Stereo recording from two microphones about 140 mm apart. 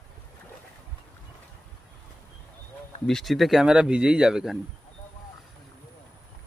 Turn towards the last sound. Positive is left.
turn(degrees=-5)  # may be behind; listen again after turning